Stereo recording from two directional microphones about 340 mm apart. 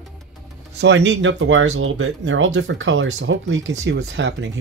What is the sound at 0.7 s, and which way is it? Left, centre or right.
Speech, right.